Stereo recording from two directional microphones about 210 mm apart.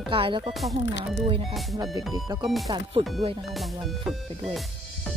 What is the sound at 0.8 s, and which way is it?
Speech, 55° left (ahead or behind).